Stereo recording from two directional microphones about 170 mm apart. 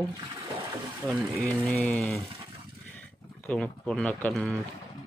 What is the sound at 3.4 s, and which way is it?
Speech, 5° left (ahead or behind).